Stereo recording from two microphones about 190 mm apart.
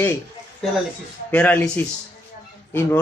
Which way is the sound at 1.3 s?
5° left (ahead or behind).